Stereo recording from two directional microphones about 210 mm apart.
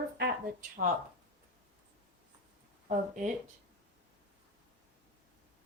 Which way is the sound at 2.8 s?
35° right (ahead or behind).